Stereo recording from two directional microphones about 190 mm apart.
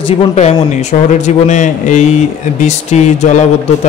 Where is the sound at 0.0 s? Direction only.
30° left (ahead or behind).